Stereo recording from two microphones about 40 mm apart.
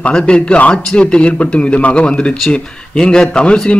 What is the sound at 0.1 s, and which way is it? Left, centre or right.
Speech, left.